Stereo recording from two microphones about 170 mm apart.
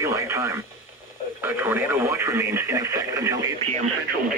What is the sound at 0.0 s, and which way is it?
Radio, 15° right (ahead or behind).